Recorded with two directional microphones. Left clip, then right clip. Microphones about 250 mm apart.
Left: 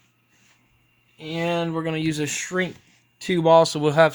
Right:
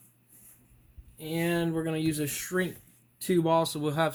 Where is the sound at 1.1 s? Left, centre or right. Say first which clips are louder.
Left 5 dB; left.